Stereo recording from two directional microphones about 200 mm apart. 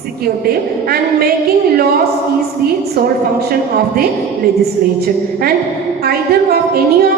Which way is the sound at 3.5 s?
50° right (ahead or behind).